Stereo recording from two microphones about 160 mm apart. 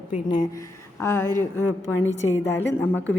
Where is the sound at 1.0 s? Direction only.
15° left (ahead or behind).